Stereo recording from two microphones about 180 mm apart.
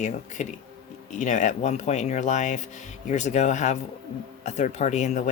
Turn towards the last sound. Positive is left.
turn(degrees=40)  # may be behind; listen again after turning